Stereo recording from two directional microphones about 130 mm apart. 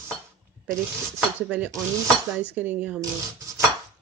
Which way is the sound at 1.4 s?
10° right (ahead or behind).